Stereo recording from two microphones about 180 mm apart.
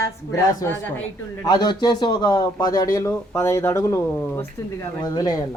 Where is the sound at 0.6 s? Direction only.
15° left (ahead or behind).